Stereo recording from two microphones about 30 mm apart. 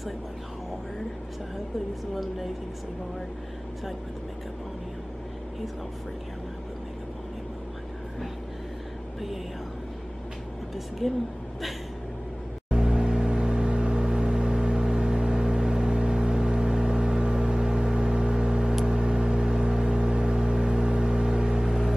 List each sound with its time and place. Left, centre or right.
11.0 s a woman's voice: centre
12.7 s vehicle: right
18.3 s a sound: right
18.9 s vehicle: right